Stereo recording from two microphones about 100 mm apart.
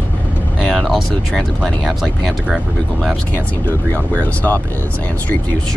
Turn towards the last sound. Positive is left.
turn(degrees=15)  # may be behind; listen again after turning